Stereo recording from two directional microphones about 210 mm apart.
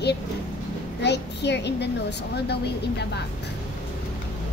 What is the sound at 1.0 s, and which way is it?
A child's voice, 55° left (ahead or behind).